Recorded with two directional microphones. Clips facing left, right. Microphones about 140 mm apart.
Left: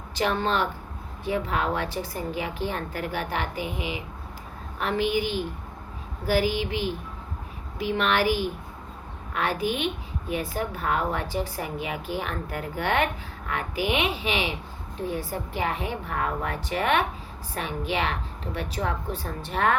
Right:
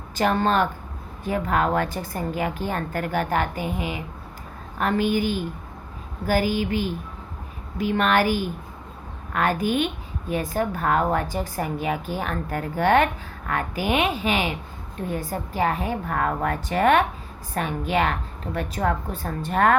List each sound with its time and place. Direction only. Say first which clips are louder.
0.2 s a woman's voice: right 4 dB; 45° right (ahead or behind)